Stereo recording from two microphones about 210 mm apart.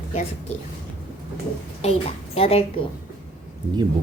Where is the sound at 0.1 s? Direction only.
30° left (ahead or behind).